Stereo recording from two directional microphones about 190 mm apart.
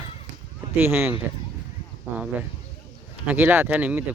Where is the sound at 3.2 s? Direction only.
10° right (ahead or behind).